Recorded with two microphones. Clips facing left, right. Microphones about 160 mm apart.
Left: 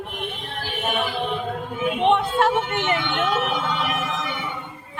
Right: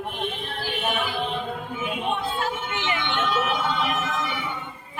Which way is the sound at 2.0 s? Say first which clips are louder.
Left 10 dB; 80° left.